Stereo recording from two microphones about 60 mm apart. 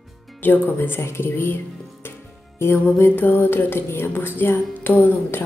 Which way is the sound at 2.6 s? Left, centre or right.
Left.